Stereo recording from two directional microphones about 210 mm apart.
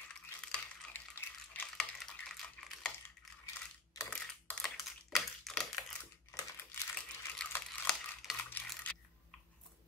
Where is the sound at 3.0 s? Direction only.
15° left (ahead or behind).